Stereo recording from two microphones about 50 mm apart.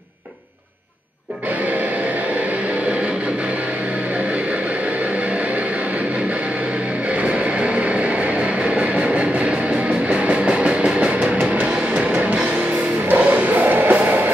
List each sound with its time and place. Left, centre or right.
7.2 s vehicle: right
10.0 s music: right